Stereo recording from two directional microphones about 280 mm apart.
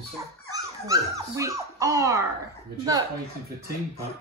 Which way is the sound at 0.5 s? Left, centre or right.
Centre.